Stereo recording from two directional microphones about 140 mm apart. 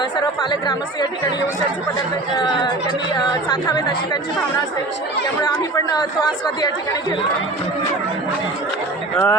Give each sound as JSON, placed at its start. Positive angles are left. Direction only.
{"t": 2.3, "sound": "speech", "side_deg": 35}
{"t": 5.4, "sound": "speech", "side_deg": 25}
{"t": 9.1, "sound": "speech", "side_deg": 15}